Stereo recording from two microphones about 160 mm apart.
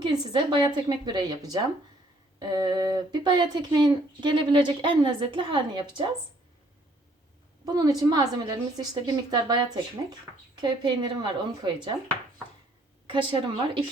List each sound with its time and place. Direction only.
0.0 s a woman's voice: 30° right (ahead or behind)
7.6 s a woman's voice: 25° right (ahead or behind)
13.1 s a woman's voice: 30° right (ahead or behind)